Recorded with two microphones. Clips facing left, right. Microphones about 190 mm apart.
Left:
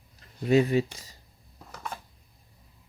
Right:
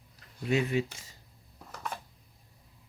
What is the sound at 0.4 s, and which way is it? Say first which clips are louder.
Speech: left 6 dB; 35° left (ahead or behind).